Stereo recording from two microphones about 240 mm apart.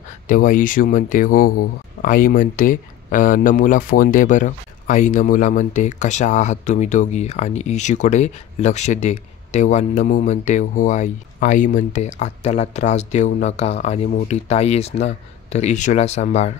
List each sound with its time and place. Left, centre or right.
0.3 s speech: left